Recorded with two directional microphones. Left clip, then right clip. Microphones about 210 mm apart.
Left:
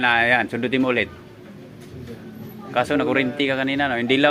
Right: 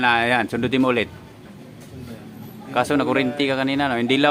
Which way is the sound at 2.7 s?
15° right (ahead or behind).